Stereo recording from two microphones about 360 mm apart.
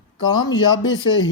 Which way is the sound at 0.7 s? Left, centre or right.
Left.